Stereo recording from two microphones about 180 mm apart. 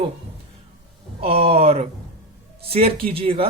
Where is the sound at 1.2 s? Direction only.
30° right (ahead or behind).